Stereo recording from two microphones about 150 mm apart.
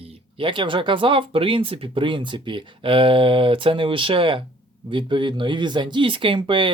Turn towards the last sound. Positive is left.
turn(degrees=-35)  # may be behind; listen again after turning